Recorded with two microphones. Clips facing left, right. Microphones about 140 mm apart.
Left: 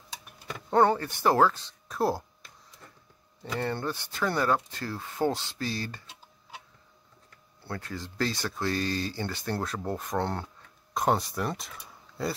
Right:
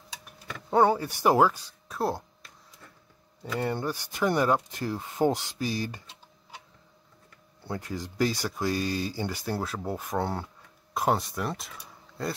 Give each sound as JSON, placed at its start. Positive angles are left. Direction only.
{"t": 0.7, "sound": "speech", "side_deg": -10}
{"t": 2.0, "sound": "a sound", "side_deg": 0}
{"t": 3.5, "sound": "speech", "side_deg": -10}
{"t": 7.6, "sound": "speech", "side_deg": -15}